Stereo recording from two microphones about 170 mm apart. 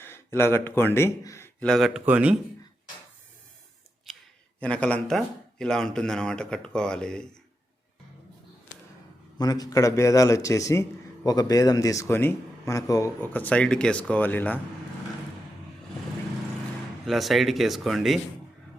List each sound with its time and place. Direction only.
0.0 s speech: 15° left (ahead or behind)
1.5 s speech: 5° left (ahead or behind)
4.6 s speech: 10° left (ahead or behind)
9.4 s speech: 20° left (ahead or behind)
17.1 s speech: centre (ahead or behind)